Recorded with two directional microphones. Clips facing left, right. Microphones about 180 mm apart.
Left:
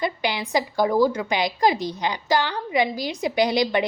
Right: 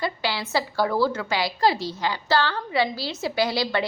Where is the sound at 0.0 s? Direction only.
20° left (ahead or behind).